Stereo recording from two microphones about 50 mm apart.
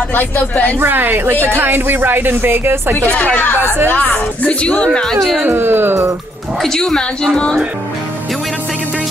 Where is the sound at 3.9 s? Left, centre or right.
Left; by 5.2 s centre.